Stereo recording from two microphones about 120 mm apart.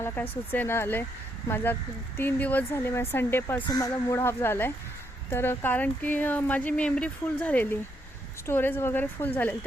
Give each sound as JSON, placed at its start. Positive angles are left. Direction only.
{"t": 0.0, "sound": "speech", "side_deg": 15}